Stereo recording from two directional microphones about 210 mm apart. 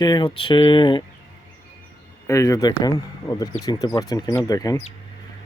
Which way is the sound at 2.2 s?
15° left (ahead or behind).